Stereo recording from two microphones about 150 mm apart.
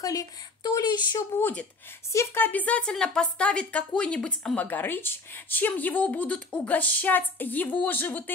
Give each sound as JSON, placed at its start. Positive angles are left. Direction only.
{"t": 0.0, "sound": "speech", "side_deg": 20}
{"t": 1.3, "sound": "speech", "side_deg": 10}